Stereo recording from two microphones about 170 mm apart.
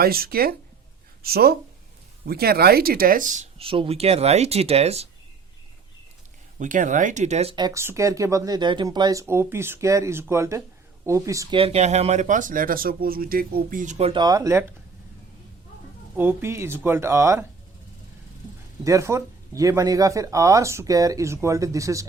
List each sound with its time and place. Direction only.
0.0 s speech: 60° right (ahead or behind); by 5.0 s 35° right (ahead or behind)
6.6 s speech: 50° right (ahead or behind)
7.5 s speech: 20° right (ahead or behind)
11.5 s speech: 35° right (ahead or behind)
14.1 s speech: 25° right (ahead or behind)
16.1 s speech: 15° right (ahead or behind)
18.9 s speech: 15° right (ahead or behind)